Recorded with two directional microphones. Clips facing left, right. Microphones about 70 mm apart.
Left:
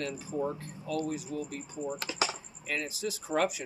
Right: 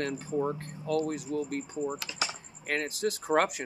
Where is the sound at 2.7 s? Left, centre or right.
Right.